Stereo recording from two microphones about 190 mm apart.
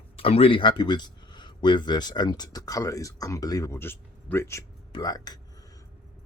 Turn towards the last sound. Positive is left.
turn(degrees=20)  # may be behind; listen again after turning